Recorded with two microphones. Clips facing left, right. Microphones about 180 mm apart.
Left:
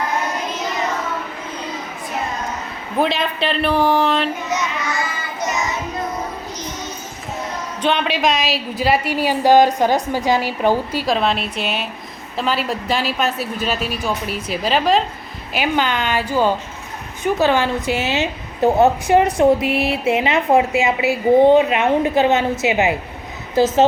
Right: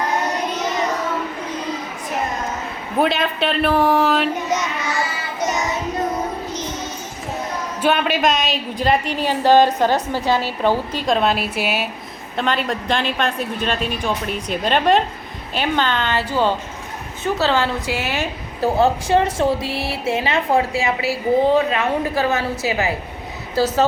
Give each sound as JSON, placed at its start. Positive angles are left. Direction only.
{"t": 3.0, "sound": "speech", "side_deg": 0}
{"t": 7.8, "sound": "a woman's voice", "side_deg": -5}